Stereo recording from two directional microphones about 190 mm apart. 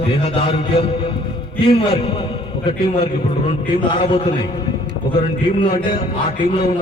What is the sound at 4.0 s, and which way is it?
Speech, 30° left (ahead or behind).